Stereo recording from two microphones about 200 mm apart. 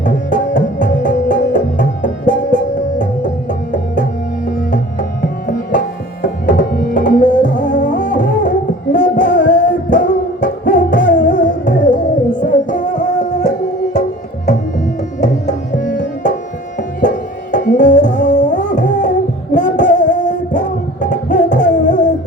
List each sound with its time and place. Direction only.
0.0 s music: 40° left (ahead or behind)
15.2 s tabla: 35° left (ahead or behind)
17.5 s music: 40° left (ahead or behind)